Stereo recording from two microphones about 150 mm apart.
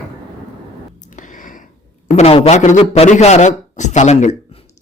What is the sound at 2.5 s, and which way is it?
A man's voice, 55° left (ahead or behind).